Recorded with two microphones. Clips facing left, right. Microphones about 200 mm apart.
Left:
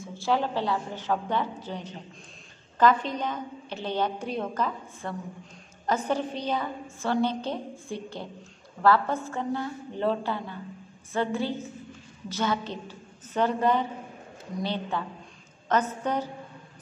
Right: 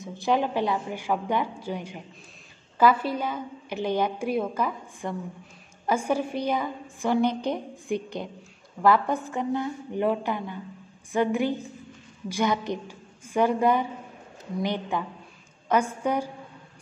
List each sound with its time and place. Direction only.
0.0 s a woman's voice: 15° right (ahead or behind)